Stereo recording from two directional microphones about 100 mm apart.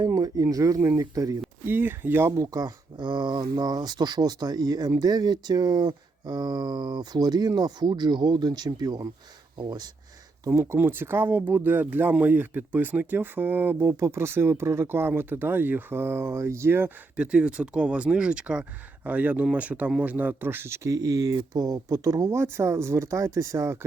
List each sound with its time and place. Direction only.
0.0 s speech: 35° right (ahead or behind)
1.6 s speech: 20° right (ahead or behind); by 9.9 s 45° right (ahead or behind)
10.4 s speech: 25° right (ahead or behind)
17.2 s speech: 10° right (ahead or behind); by 23.8 s 30° right (ahead or behind)